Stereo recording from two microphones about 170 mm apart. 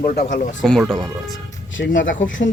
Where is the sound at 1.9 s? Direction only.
50° left (ahead or behind).